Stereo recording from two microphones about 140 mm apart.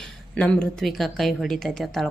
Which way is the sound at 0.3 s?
5° left (ahead or behind).